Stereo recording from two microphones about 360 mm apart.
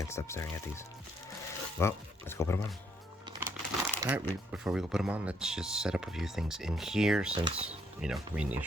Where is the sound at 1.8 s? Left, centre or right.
Centre.